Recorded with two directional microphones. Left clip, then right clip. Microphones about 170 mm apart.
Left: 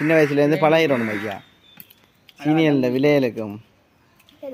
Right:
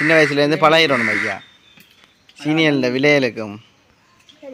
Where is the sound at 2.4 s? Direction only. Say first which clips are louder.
Right 2 dB; 15° left (ahead or behind).